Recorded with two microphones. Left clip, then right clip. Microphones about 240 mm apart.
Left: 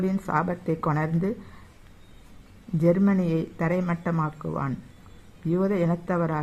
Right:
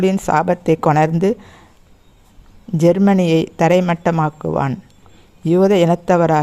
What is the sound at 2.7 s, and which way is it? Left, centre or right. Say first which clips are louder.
Speech: right 10 dB; right.